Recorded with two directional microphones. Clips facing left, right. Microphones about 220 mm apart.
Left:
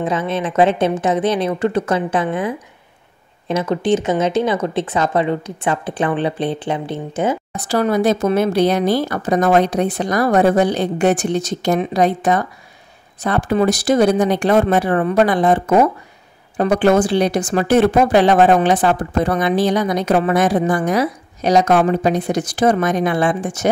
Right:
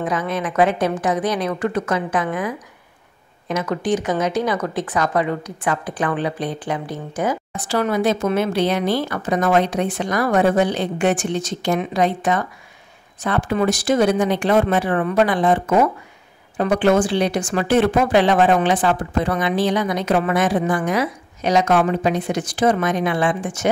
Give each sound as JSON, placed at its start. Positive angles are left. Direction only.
{"t": 0.0, "sound": "speech", "side_deg": 25}
{"t": 7.5, "sound": "speech", "side_deg": 40}